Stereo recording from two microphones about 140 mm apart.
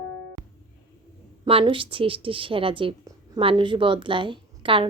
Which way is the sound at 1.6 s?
40° right (ahead or behind).